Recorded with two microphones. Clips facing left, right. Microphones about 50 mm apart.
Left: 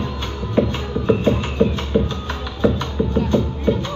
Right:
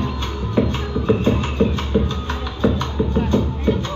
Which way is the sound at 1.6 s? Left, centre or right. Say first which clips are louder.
Left 1 dB; centre.